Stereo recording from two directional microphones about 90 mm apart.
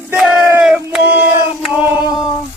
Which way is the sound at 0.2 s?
10° right (ahead or behind).